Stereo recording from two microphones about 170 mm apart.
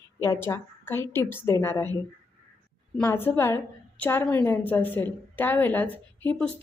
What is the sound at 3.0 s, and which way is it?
A woman's voice, 15° left (ahead or behind).